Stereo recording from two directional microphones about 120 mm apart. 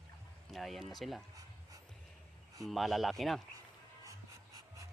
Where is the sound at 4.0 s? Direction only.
25° right (ahead or behind).